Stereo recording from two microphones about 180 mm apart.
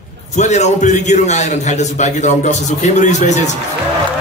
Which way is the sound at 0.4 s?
40° left (ahead or behind).